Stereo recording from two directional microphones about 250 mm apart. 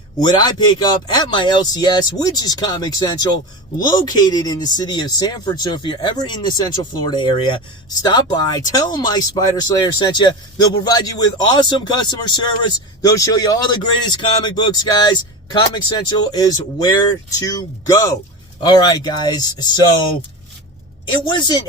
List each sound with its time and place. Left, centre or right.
0.2 s speech: centre
21.2 s speech: centre